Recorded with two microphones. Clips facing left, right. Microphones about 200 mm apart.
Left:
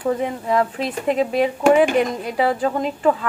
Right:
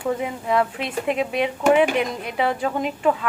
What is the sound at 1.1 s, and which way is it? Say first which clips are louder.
Speech: left 6 dB; 35° left (ahead or behind).